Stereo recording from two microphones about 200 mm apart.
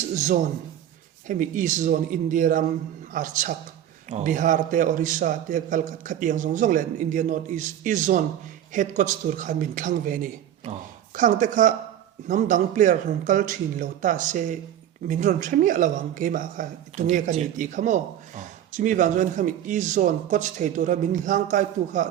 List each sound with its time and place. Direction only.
0.1 s a man's voice: 40° right (ahead or behind)